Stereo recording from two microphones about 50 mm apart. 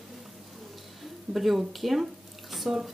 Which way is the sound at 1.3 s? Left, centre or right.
Centre.